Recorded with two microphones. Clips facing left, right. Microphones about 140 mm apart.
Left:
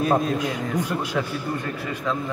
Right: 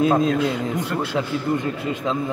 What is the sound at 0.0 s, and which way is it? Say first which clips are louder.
Speech: right 3 dB; 20° right (ahead or behind).